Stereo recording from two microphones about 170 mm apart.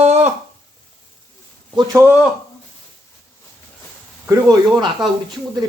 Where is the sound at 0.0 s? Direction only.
40° right (ahead or behind).